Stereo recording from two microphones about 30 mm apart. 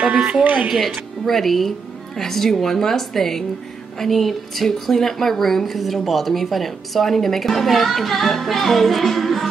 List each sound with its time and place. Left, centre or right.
0.4 s speech: right
0.7 s a woman's voice: centre